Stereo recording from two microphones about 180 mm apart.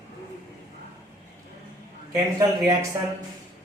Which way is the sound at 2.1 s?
15° right (ahead or behind).